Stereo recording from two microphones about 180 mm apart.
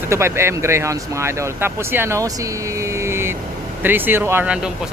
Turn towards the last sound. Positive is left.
turn(degrees=-5)  # may be behind; listen again after turning